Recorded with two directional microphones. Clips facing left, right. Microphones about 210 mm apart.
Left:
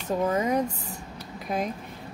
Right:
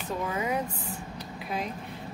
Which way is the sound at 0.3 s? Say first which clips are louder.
Left 4 dB; 40° left (ahead or behind).